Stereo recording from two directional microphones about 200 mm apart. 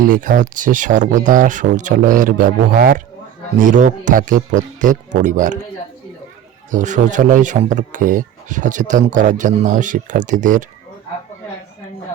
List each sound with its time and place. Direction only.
0.0 s speech: 45° right (ahead or behind)
6.7 s speech: 40° right (ahead or behind)